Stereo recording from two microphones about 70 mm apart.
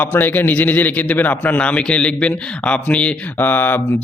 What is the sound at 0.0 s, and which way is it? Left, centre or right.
A man's voice, left.